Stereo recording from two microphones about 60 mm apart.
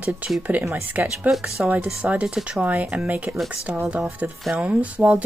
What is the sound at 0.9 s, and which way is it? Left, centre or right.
Speech, right.